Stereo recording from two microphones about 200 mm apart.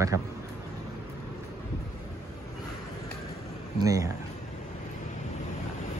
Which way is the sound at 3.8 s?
15° right (ahead or behind).